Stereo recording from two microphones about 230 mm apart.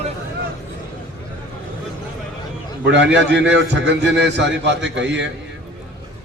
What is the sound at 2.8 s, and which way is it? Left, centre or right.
A man's voice, right.